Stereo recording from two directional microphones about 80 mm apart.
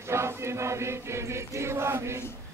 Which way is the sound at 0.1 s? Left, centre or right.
Right.